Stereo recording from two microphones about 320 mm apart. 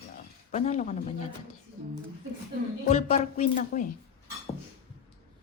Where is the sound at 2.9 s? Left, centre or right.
Left.